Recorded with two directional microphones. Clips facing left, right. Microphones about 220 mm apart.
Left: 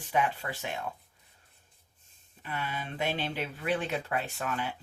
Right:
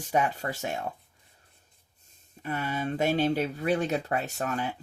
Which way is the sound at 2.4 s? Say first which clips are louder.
Right 6 dB; 45° right (ahead or behind).